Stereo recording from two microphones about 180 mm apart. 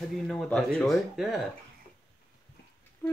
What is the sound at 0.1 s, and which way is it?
Speech, centre (ahead or behind).